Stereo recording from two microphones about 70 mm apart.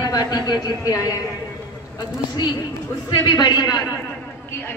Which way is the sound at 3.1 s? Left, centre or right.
Left.